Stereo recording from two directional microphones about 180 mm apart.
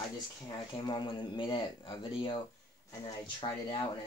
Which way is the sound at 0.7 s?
25° left (ahead or behind).